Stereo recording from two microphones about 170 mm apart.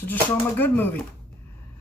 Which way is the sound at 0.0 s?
10° left (ahead or behind).